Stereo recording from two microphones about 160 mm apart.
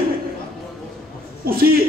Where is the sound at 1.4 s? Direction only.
65° right (ahead or behind).